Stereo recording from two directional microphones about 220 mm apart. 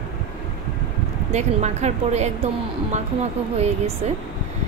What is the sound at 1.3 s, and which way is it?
Speech, 30° right (ahead or behind).